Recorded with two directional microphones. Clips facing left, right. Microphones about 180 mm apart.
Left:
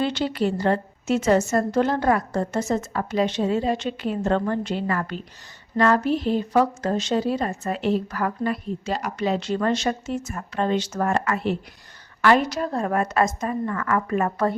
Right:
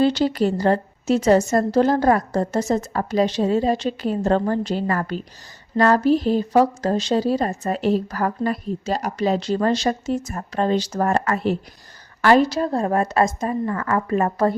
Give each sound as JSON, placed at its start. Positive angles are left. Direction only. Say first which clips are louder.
{"t": 0.0, "sound": "speech", "louder": "right 5 dB", "side_deg": -40}